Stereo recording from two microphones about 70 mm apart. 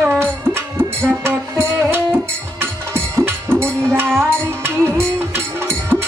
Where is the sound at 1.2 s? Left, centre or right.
Right.